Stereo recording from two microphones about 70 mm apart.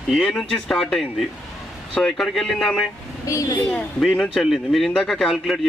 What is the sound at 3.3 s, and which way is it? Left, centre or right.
Speech, left.